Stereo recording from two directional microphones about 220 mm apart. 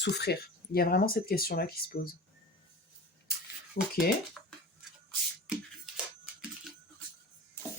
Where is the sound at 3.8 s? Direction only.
40° left (ahead or behind).